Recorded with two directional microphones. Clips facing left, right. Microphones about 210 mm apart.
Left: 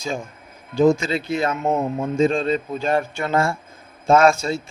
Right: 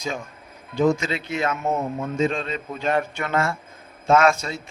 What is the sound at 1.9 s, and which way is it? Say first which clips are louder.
A man's voice: left 4 dB; 30° left (ahead or behind).